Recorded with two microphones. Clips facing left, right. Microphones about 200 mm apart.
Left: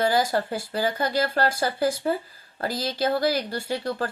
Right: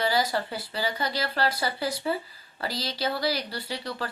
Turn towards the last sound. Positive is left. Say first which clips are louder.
# left 6 dB
turn(degrees=50)  # may be behind; listen again after turning